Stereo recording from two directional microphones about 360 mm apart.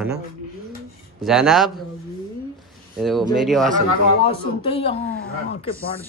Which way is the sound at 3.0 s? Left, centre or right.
Centre.